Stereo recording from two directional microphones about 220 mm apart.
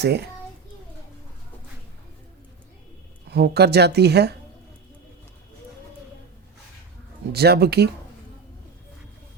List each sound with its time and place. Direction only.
0.0 s speech: 50° right (ahead or behind)
3.2 s speech: 45° right (ahead or behind)
7.3 s speech: 45° right (ahead or behind)